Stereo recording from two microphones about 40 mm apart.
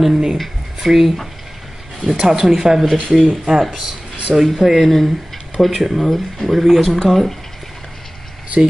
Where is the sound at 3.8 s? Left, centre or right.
Centre.